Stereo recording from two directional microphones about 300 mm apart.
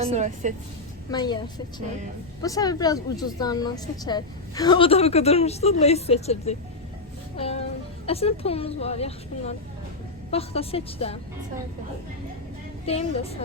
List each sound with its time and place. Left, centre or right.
0.0 s a woman's voice: right
1.1 s a woman's voice: centre
12.8 s speech: centre